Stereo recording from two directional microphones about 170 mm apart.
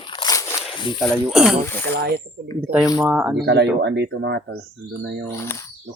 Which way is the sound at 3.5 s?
90° right.